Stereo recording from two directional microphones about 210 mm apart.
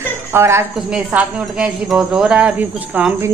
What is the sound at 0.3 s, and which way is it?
A woman's voice, 10° right (ahead or behind).